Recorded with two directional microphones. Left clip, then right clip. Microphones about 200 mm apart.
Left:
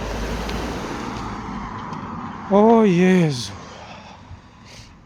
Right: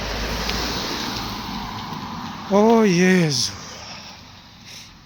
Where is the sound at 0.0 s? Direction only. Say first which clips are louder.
Right 2 dB; 35° left (ahead or behind).